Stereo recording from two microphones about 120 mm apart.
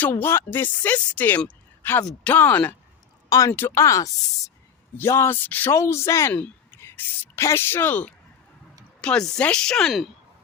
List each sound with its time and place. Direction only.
0.0 s speech: 15° left (ahead or behind)
3.2 s speech: 30° left (ahead or behind); by 10.1 s centre (ahead or behind)